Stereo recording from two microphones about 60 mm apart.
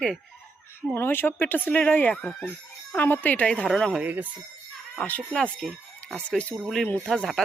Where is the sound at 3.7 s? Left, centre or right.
Centre.